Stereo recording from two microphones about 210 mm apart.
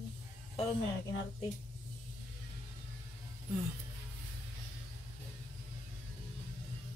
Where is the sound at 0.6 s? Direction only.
30° left (ahead or behind).